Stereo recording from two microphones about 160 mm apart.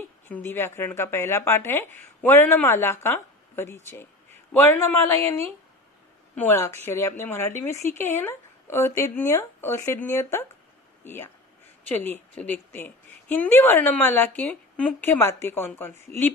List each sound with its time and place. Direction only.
0.3 s a woman's voice: 15° left (ahead or behind)